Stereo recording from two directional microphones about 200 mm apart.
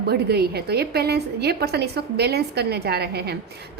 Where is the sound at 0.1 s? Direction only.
55° right (ahead or behind).